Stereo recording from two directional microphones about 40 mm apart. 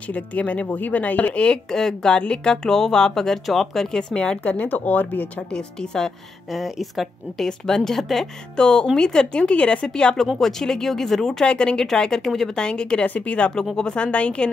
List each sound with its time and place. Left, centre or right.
0.1 s speech: left
1.7 s a woman's voice: centre
3.9 s speech: centre
4.4 s speech: left
5.5 s speech: left
6.5 s a woman's voice: centre
7.4 s speech: centre
8.5 s speech: centre
10.4 s speech: centre
11.4 s speech: left
12.5 s speech: left
13.0 s speech: left
13.7 s speech: left